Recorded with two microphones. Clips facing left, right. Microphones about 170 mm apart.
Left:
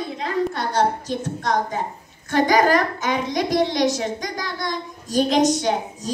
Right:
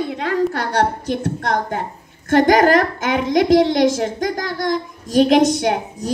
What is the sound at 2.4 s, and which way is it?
A woman's voice, 50° right (ahead or behind).